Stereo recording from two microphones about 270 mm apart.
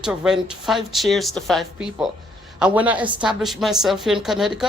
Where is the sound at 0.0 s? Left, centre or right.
Centre.